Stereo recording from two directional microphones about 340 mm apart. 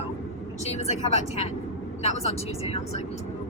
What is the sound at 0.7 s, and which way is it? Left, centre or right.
Speech, centre.